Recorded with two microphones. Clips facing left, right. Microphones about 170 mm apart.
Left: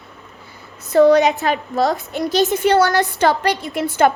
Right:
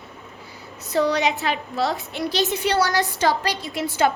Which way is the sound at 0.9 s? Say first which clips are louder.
Left 9 dB; 55° left (ahead or behind).